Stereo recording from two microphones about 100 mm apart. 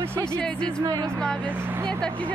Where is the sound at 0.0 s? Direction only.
25° right (ahead or behind).